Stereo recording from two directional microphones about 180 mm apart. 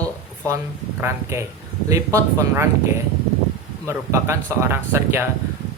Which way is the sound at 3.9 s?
15° right (ahead or behind).